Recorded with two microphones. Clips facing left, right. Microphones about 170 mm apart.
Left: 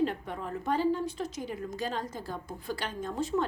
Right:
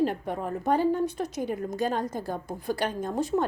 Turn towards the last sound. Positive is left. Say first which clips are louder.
# right 4 dB
turn(degrees=-40)  # may be behind; listen again after turning